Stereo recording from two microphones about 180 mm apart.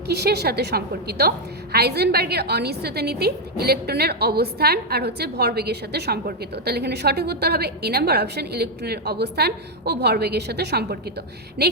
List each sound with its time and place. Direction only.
0.1 s a woman's voice: 65° right (ahead or behind)